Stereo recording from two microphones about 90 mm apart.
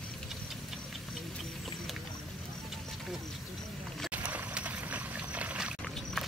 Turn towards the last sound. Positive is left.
turn(degrees=-15)  # may be behind; listen again after turning